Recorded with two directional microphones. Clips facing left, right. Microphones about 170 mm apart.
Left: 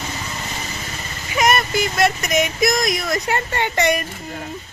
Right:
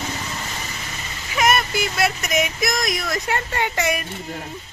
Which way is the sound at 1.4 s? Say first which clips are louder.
Left 2 dB; centre (ahead or behind).